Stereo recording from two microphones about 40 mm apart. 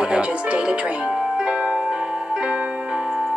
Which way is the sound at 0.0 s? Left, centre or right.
Right.